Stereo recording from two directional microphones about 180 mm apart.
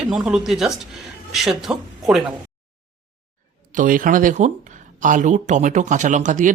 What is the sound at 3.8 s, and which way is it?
Speech, 50° right (ahead or behind).